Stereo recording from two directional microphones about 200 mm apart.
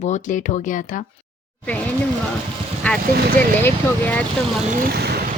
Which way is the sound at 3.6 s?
10° left (ahead or behind).